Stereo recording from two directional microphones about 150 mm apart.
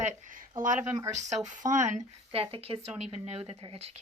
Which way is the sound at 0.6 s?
60° right (ahead or behind).